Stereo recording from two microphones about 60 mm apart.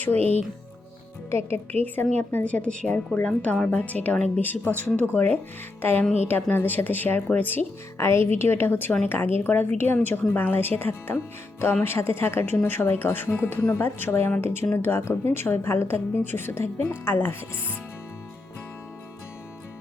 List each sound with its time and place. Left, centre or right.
0.0 s a woman's voice: left
1.3 s a woman's voice: left
2.3 s a woman's voice: left
7.9 s a woman's voice: left